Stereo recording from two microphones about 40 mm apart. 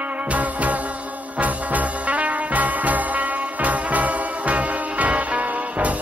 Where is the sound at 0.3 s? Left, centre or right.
Right.